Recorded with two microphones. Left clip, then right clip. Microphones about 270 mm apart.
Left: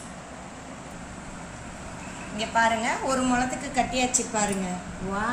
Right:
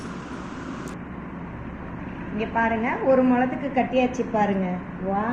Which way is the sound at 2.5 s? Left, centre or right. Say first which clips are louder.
Left 1 dB; left.